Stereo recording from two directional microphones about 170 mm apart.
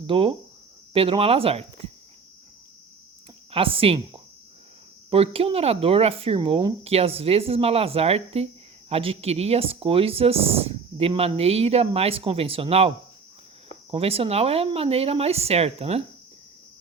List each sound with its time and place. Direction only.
0.1 s speech: 30° right (ahead or behind)
3.5 s speech: 35° right (ahead or behind)
13.9 s speech: 35° right (ahead or behind)